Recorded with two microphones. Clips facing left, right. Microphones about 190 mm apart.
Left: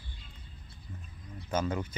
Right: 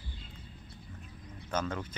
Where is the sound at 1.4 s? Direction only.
10° left (ahead or behind).